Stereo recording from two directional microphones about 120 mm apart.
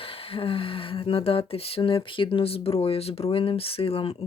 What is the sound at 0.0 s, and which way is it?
Speech, 50° left (ahead or behind).